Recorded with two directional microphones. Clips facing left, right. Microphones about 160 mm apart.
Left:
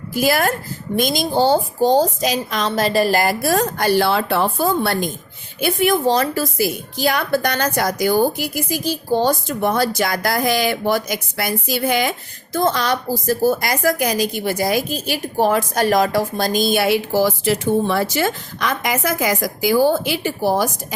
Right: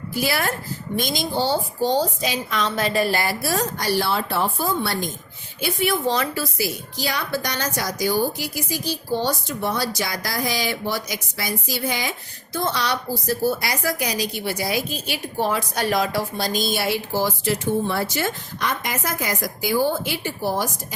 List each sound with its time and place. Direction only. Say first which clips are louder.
0.2 s a woman's voice: left 6 dB; 45° left (ahead or behind); by 20.7 s 90° left